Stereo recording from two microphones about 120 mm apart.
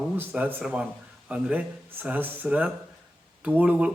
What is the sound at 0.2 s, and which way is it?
Speech, 15° right (ahead or behind).